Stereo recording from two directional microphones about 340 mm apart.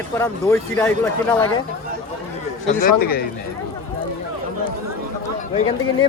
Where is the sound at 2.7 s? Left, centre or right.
Left.